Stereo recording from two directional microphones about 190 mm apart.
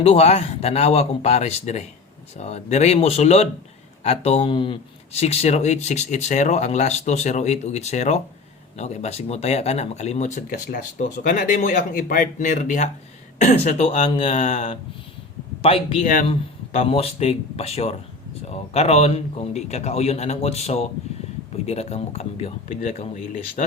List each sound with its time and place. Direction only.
0.0 s speech: 35° left (ahead or behind)